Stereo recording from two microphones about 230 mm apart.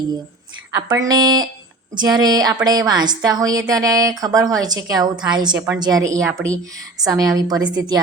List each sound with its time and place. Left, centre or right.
0.8 s a woman's voice: centre